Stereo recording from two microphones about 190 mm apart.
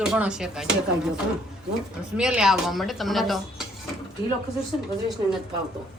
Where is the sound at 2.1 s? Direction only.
5° right (ahead or behind).